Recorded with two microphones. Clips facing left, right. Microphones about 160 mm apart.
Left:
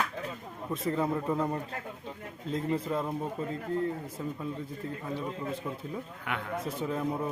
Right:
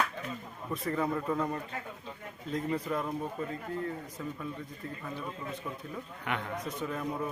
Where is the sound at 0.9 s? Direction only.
25° left (ahead or behind).